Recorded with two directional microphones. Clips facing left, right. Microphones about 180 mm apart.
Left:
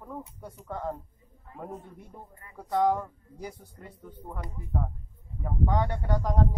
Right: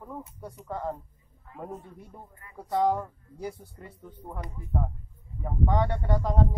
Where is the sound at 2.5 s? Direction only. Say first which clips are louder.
Even; 10° right (ahead or behind).